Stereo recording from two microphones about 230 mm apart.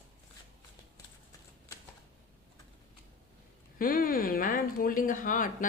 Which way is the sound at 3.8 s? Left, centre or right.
Left.